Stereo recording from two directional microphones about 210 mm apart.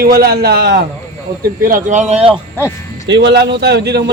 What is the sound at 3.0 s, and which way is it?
Speech, 55° right (ahead or behind).